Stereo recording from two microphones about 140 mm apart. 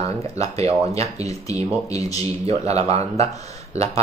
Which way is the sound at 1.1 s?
25° left (ahead or behind).